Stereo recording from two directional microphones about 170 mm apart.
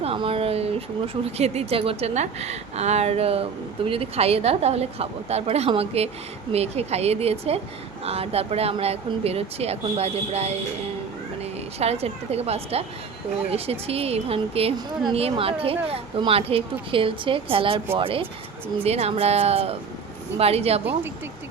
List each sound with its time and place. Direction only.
0.0 s speech: 35° right (ahead or behind)
11.8 s speech: 40° right (ahead or behind)